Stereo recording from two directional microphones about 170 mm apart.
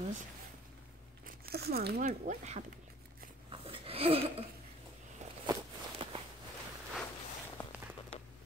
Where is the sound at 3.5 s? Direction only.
35° right (ahead or behind).